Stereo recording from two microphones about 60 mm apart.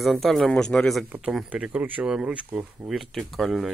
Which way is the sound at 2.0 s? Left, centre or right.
Centre.